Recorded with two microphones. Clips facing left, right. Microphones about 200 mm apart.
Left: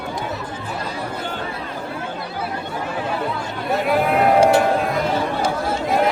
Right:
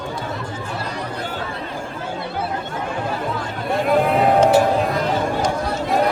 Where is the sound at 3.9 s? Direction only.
5° left (ahead or behind).